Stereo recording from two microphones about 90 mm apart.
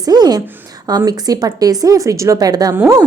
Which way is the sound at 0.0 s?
45° right (ahead or behind).